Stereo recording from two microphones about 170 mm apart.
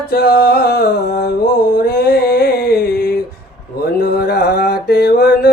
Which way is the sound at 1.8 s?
70° left (ahead or behind).